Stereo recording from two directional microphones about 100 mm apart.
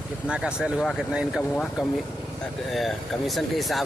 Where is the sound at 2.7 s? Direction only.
Centre (ahead or behind).